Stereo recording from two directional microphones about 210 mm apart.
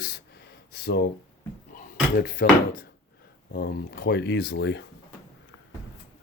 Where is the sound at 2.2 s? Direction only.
45° left (ahead or behind).